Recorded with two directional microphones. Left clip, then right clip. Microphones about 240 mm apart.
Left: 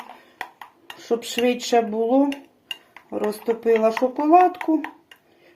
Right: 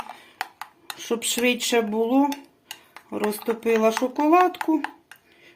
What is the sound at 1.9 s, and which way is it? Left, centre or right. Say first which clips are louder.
A child's voice: left 2 dB; centre.